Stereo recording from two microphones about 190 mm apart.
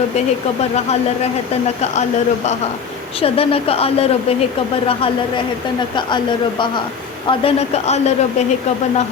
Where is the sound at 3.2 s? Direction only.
30° left (ahead or behind).